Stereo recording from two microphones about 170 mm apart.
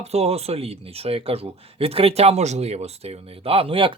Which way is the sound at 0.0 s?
40° right (ahead or behind).